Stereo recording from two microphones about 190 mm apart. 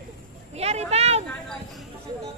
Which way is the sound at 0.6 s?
35° right (ahead or behind).